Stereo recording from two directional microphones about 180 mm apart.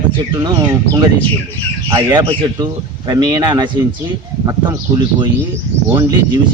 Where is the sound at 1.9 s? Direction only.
20° right (ahead or behind).